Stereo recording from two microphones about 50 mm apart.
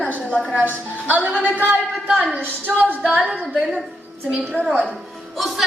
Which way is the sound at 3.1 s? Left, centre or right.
Right.